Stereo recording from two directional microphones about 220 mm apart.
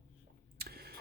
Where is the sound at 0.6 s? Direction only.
45° right (ahead or behind).